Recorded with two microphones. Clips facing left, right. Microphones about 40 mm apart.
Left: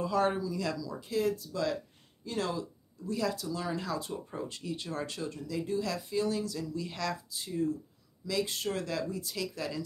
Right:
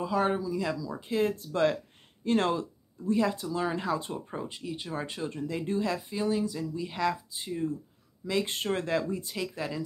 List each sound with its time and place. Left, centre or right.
0.0 s speech: centre; by 2.6 s right
3.1 s speech: right
4.5 s speech: centre
5.3 s speech: right
5.9 s speech: centre